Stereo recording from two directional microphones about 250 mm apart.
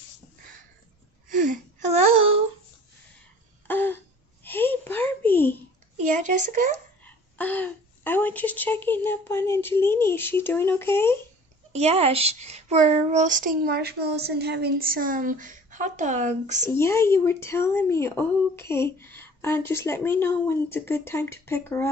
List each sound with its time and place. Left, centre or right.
1.3 s a sound: right
3.6 s a sound: centre
6.0 s speech: right
7.0 s speech: centre
11.7 s a child's voice: right
16.6 s speech: centre